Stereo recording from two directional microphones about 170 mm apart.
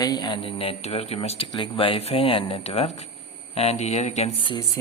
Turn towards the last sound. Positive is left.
turn(degrees=30)  # may be behind; listen again after turning